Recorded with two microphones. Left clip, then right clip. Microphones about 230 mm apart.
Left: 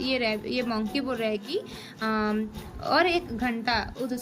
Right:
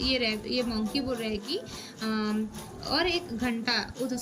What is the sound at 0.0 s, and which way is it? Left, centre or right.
A woman's voice, centre.